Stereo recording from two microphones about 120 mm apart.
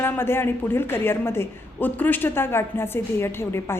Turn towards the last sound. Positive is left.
turn(degrees=20)  # may be behind; listen again after turning